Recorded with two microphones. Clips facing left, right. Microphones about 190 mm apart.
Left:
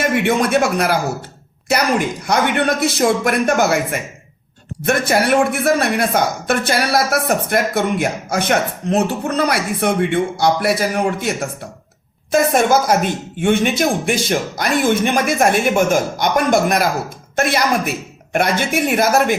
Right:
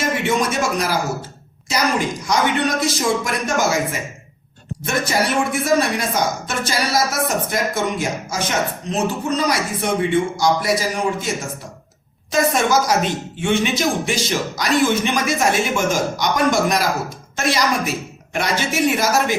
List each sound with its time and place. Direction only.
0.0 s speech: 60° left (ahead or behind)
2.2 s speech: 60° left (ahead or behind)
4.9 s speech: 60° left (ahead or behind)